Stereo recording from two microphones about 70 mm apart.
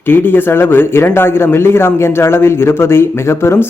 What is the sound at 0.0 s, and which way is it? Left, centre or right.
Speech, left.